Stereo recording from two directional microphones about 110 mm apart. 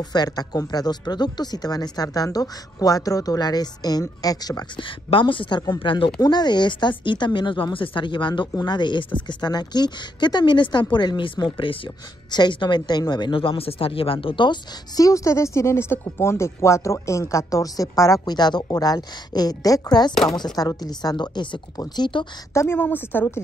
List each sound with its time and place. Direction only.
0.0 s speech: 40° left (ahead or behind)
4.7 s a woman's voice: 50° left (ahead or behind)
5.8 s a woman's voice: 50° left (ahead or behind)
6.2 s a woman's voice: 40° left (ahead or behind)
15.0 s speech: 30° left (ahead or behind)
22.5 s a woman's voice: 25° left (ahead or behind)